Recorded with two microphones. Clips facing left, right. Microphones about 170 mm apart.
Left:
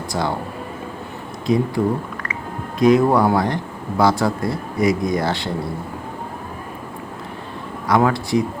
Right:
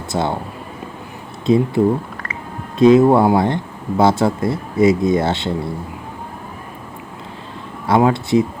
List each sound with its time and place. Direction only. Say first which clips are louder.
0.1 s speech: right 3 dB; 25° right (ahead or behind)
1.5 s speech: right 4 dB; 25° right (ahead or behind)
7.9 s speech: right 3 dB; 25° right (ahead or behind)